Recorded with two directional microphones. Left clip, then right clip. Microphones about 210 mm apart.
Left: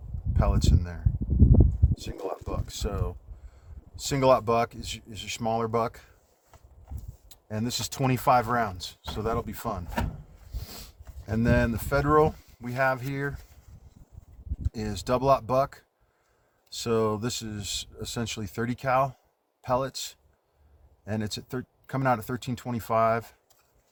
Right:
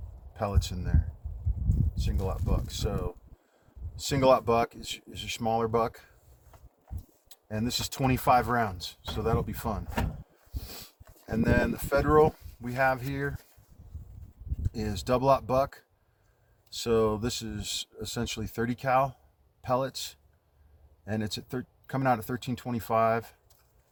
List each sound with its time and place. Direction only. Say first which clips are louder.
0.3 s speech: left 3 dB; 20° left (ahead or behind)
14.7 s speech: left 1 dB; 15° left (ahead or behind)